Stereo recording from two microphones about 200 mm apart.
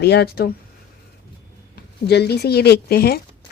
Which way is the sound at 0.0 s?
55° left (ahead or behind).